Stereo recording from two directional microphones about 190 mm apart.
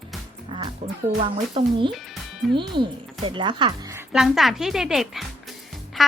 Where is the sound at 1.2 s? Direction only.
25° right (ahead or behind).